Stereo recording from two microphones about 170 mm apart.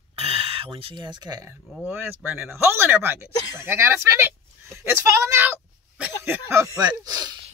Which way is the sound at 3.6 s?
15° right (ahead or behind).